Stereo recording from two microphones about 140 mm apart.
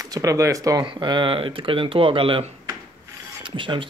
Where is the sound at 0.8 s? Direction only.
35° right (ahead or behind).